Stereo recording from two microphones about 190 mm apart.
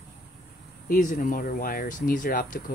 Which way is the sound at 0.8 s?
45° left (ahead or behind).